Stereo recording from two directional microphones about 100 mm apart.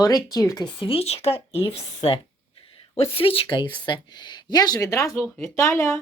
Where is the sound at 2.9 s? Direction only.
70° left (ahead or behind).